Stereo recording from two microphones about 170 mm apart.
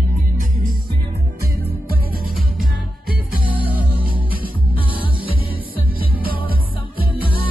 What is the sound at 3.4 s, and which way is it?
Music, 55° right (ahead or behind).